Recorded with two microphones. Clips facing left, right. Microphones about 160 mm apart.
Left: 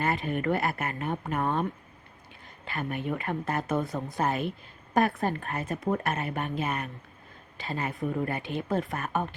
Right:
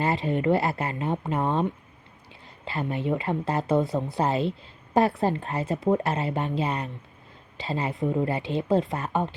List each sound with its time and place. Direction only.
0.0 s a woman's voice: 25° right (ahead or behind)